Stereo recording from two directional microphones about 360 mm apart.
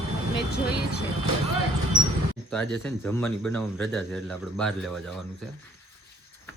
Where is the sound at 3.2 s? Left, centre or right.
Centre.